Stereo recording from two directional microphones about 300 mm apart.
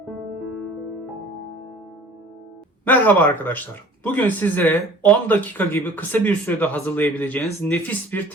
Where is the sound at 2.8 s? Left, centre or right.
Centre.